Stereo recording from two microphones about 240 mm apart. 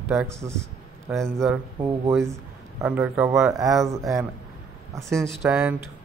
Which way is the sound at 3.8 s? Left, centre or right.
Centre.